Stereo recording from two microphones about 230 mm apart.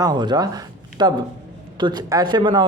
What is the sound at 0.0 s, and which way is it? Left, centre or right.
A man's voice, centre.